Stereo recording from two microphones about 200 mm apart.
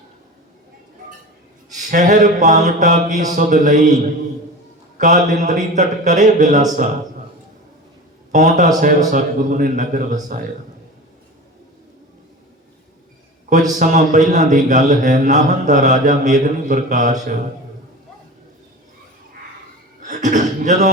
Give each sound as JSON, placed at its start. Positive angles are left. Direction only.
{"t": 1.8, "sound": "mantra", "side_deg": -40}
{"t": 8.3, "sound": "a man's voice", "side_deg": -40}
{"t": 9.1, "sound": "mantra", "side_deg": -40}
{"t": 13.7, "sound": "mantra", "side_deg": -40}
{"t": 20.0, "sound": "mantra", "side_deg": -40}